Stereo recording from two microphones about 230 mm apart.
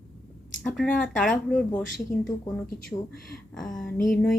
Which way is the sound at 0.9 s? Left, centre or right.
Centre.